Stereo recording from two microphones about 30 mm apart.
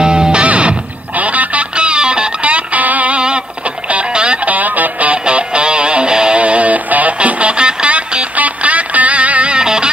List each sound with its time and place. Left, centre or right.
0.0 s music: right
1.1 s music: right
2.4 s music: right
2.8 s a sound: right
3.1 s a sound: right
4.1 s music: right
4.5 s music: right
5.1 s music: right
6.4 s music: right
7.2 s music: right
8.4 s music: right
9.5 s music: right